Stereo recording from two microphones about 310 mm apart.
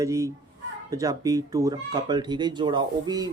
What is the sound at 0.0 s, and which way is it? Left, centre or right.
Speech, centre.